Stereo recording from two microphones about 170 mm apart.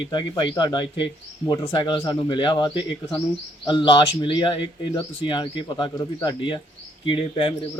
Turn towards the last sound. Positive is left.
turn(degrees=30)  # may be behind; listen again after turning